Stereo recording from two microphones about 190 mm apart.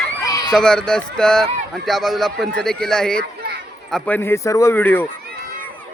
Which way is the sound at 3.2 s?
55° right (ahead or behind).